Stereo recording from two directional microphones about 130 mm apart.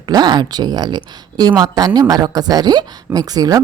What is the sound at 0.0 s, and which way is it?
A woman's voice, 35° right (ahead or behind).